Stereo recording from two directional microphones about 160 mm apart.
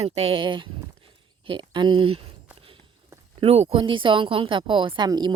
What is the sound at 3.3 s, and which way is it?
A woman's voice, 40° right (ahead or behind).